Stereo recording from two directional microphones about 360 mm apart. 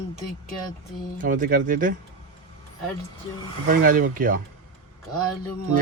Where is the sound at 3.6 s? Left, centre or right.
Right.